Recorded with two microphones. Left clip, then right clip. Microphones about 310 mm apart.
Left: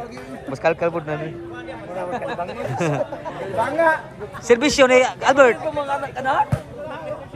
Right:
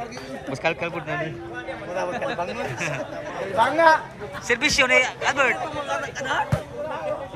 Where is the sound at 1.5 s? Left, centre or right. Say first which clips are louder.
Right 1 dB; right.